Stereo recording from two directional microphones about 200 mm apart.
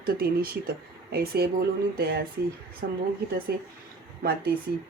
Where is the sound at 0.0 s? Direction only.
50° right (ahead or behind).